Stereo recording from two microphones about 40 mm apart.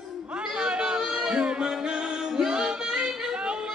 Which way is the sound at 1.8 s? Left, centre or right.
Centre.